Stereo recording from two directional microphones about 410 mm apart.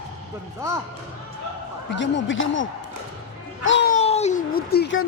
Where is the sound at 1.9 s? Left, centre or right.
Left.